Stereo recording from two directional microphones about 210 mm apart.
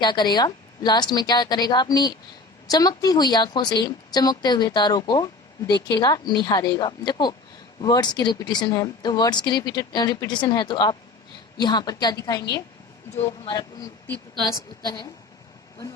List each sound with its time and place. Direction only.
0.0 s a woman's voice: 20° left (ahead or behind)